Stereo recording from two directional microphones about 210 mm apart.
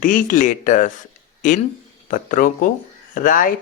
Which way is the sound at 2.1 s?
40° left (ahead or behind).